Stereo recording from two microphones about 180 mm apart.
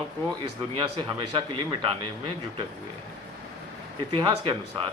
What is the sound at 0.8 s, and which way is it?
Speech, 25° right (ahead or behind).